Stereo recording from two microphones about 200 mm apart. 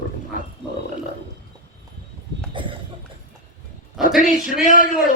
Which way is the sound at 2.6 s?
25° right (ahead or behind).